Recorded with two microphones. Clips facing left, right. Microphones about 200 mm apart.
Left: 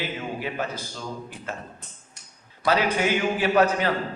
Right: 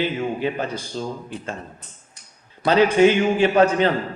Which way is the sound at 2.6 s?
25° right (ahead or behind).